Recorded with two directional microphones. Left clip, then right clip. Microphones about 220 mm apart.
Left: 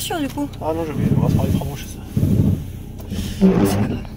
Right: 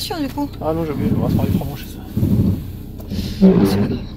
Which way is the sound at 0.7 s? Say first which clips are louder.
Right 2 dB; 50° right (ahead or behind).